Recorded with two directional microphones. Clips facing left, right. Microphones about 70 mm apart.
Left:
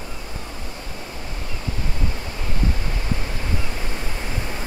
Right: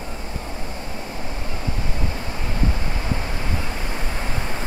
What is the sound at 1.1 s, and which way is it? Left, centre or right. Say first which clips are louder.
Waves: right 3 dB; right.